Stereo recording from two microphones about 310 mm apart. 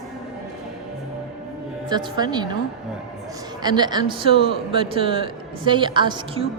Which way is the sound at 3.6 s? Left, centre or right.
Centre.